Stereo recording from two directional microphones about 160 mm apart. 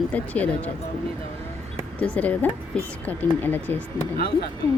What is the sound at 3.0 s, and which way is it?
Speech, 10° left (ahead or behind).